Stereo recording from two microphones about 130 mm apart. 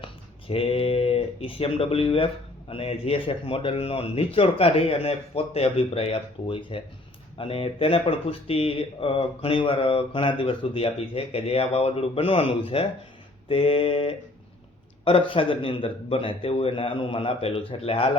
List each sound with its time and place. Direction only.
0.0 s speech: 45° left (ahead or behind)